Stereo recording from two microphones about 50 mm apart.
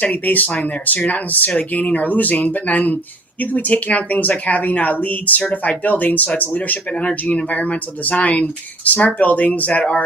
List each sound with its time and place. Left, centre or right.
0.0 s speech: left